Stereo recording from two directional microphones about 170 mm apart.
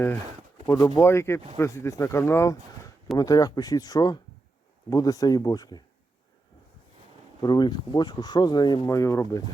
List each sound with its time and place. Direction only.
0.6 s speech: 25° left (ahead or behind)
7.4 s speech: 25° left (ahead or behind)